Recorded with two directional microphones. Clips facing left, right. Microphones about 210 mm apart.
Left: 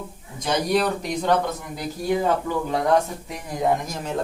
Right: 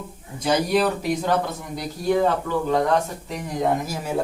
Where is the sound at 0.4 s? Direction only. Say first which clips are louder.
Right 2 dB; 5° right (ahead or behind).